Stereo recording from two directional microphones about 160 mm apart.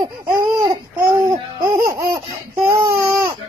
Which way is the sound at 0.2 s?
25° right (ahead or behind).